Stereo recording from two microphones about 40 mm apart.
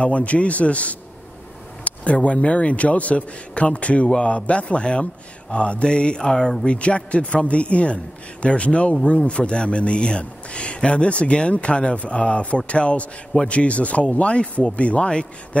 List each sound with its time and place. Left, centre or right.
0.0 s a man's voice: left